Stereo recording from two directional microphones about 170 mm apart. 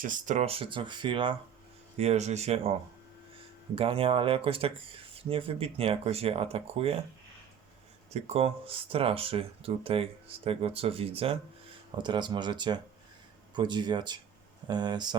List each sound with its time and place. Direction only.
0.0 s speech: 50° right (ahead or behind); by 1.4 s 30° right (ahead or behind)
2.0 s speech: 40° right (ahead or behind)
3.8 s speech: 35° right (ahead or behind)
8.1 s speech: 35° right (ahead or behind)